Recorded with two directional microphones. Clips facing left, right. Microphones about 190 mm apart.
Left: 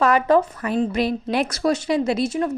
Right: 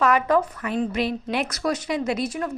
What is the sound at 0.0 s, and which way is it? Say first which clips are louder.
A woman's voice: left 3 dB; 30° left (ahead or behind).